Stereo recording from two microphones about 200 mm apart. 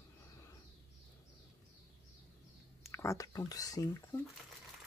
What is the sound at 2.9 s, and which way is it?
Speech, 15° left (ahead or behind).